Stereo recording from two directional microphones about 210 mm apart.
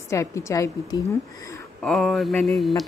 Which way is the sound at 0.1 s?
15° left (ahead or behind).